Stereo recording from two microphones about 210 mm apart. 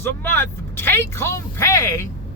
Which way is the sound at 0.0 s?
10° left (ahead or behind).